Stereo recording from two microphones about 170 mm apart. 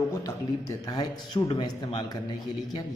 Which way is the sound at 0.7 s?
25° left (ahead or behind).